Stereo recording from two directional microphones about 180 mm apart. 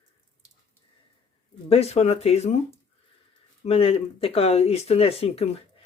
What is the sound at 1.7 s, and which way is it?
Speech, 35° left (ahead or behind).